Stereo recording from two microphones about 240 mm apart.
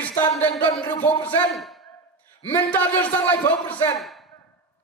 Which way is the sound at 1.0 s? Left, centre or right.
Centre.